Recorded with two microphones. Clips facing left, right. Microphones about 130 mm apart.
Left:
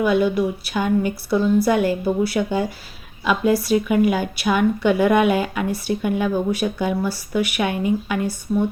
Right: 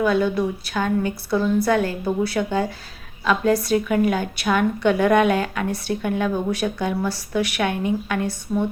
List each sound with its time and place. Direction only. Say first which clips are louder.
0.0 s a woman's voice: left 2 dB; 10° left (ahead or behind)